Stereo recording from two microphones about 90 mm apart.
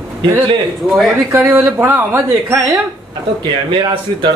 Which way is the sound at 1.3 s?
25° right (ahead or behind).